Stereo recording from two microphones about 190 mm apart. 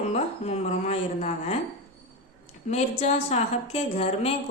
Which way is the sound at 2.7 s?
35° left (ahead or behind).